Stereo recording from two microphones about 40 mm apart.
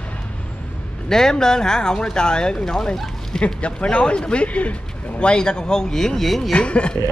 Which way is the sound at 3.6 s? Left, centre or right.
Left.